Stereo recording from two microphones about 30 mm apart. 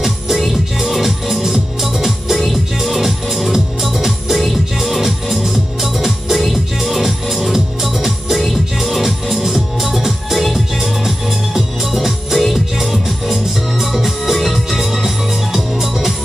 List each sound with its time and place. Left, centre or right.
0.7 s music: centre